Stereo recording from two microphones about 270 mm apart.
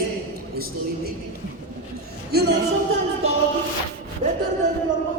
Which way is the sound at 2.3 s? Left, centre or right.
Right.